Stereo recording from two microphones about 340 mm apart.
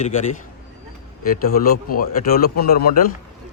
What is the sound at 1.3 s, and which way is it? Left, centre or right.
A man's voice, left.